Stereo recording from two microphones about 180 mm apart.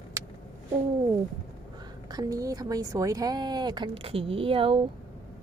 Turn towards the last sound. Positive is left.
turn(degrees=-30)  # may be behind; listen again after turning